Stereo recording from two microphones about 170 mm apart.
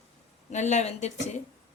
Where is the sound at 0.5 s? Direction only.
45° left (ahead or behind).